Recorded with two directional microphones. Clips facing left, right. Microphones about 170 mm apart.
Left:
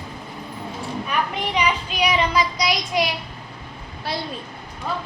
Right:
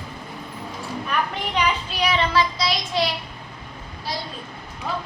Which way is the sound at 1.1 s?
10° left (ahead or behind).